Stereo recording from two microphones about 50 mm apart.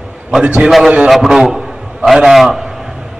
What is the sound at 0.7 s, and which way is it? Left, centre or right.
A man's voice, centre.